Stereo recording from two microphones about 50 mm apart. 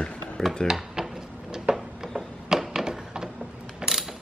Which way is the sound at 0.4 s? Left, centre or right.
Centre.